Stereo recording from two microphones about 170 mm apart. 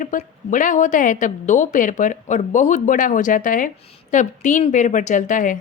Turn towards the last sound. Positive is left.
turn(degrees=50)  # may be behind; listen again after turning